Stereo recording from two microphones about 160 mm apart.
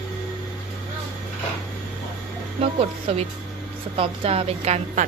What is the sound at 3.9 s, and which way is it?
A woman's voice, 35° right (ahead or behind).